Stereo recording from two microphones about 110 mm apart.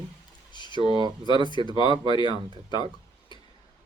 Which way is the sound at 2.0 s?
45° left (ahead or behind).